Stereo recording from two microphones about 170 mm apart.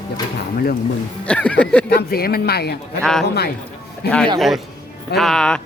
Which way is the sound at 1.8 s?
65° left (ahead or behind).